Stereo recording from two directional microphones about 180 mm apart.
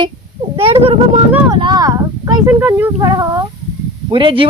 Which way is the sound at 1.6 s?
25° right (ahead or behind).